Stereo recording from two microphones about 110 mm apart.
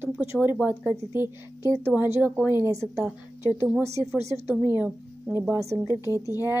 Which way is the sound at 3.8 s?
25° right (ahead or behind).